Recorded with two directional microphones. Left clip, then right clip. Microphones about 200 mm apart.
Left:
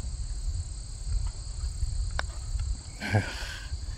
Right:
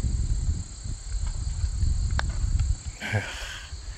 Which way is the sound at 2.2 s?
20° left (ahead or behind).